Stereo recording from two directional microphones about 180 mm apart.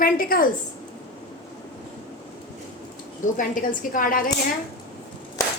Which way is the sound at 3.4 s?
50° left (ahead or behind).